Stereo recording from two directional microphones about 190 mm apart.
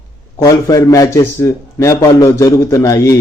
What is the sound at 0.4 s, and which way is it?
A man's voice, 20° left (ahead or behind).